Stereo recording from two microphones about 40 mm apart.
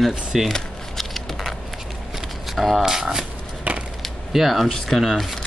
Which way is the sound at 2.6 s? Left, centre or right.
Centre.